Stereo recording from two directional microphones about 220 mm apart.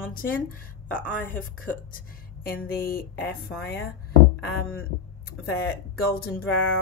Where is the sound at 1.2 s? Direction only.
10° left (ahead or behind).